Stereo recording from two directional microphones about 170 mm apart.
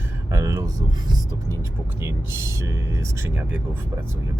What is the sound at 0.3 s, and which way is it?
Speech, 20° right (ahead or behind).